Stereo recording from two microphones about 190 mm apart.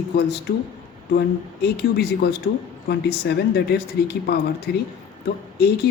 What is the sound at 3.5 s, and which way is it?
A woman's voice, 60° left (ahead or behind).